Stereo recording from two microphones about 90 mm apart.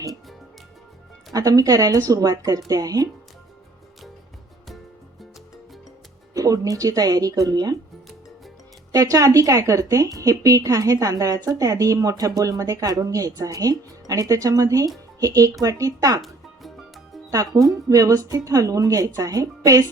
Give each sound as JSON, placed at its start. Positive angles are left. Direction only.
{"t": 1.3, "sound": "speech", "side_deg": -40}
{"t": 6.3, "sound": "speech", "side_deg": -40}
{"t": 8.9, "sound": "speech", "side_deg": -40}
{"t": 17.3, "sound": "speech", "side_deg": -40}